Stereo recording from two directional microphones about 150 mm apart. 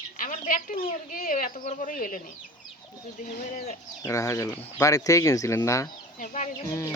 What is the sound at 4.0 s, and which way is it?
Speech, 20° left (ahead or behind).